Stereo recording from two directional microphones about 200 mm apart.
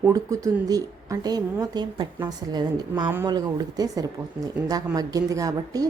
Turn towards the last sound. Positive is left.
turn(degrees=-15)  # may be behind; listen again after turning